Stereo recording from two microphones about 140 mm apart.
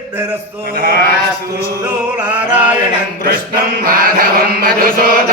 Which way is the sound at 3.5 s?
90° right.